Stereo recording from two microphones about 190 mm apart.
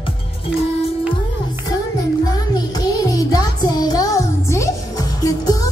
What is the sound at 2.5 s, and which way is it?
Music, 20° left (ahead or behind).